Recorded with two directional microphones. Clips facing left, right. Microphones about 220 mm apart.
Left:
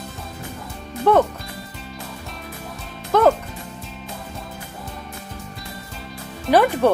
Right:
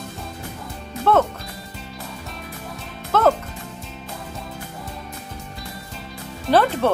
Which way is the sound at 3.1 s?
15° left (ahead or behind).